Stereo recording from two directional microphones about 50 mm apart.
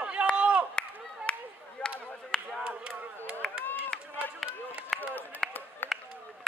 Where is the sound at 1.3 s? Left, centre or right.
Left.